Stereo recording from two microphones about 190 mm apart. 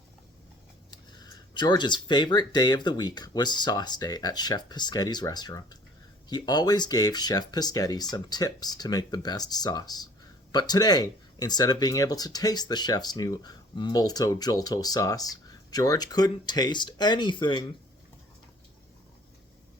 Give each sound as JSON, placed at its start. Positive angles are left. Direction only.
{"t": 0.9, "sound": "speech", "side_deg": 20}